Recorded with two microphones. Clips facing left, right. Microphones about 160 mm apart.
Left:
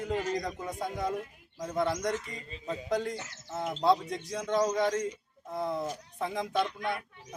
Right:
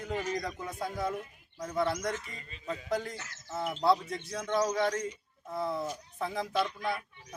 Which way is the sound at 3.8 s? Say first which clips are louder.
Left 1 dB; 20° left (ahead or behind).